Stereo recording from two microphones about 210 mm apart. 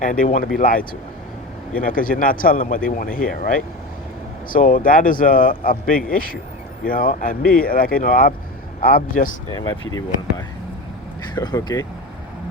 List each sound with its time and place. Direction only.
0.0 s speech: 40° left (ahead or behind)
11.2 s speech: 20° left (ahead or behind)